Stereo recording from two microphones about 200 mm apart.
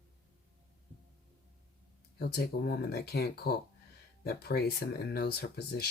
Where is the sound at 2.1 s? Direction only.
50° left (ahead or behind).